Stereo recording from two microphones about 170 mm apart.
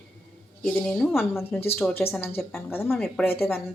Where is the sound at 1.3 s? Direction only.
10° left (ahead or behind).